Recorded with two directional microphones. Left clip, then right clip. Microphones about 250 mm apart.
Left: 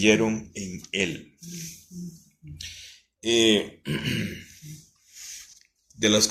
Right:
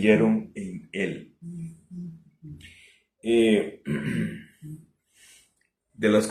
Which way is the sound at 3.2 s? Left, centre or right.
Left.